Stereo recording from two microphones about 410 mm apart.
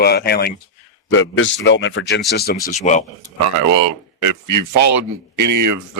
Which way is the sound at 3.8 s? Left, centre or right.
Right.